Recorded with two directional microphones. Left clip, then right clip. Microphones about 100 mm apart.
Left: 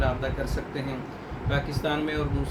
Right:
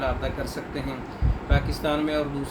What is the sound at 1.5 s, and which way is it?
Speech, 15° right (ahead or behind).